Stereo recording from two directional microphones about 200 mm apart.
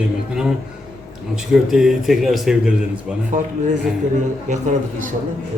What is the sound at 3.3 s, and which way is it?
Speech, 40° right (ahead or behind).